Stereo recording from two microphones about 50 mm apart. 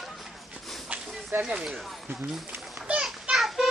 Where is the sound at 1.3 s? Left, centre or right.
Right.